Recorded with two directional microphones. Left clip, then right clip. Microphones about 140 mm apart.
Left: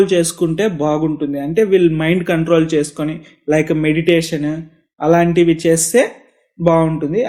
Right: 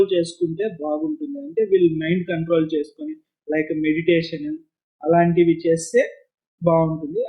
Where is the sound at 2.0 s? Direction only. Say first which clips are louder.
Left 8 dB; 35° left (ahead or behind).